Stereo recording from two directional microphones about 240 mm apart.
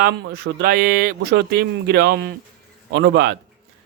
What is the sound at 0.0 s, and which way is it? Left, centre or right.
A man's voice, right.